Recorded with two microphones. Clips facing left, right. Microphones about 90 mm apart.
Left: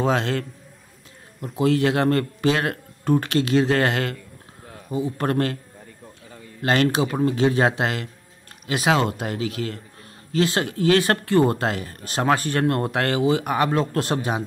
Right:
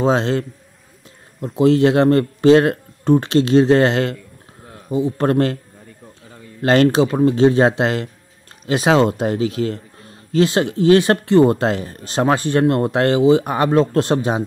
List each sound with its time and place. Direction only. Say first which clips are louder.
0.0 s speech: right 5 dB; 25° right (ahead or behind)
6.6 s speech: right 7 dB; 35° right (ahead or behind)